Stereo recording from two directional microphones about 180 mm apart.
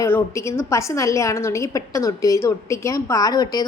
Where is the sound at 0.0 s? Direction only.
15° left (ahead or behind).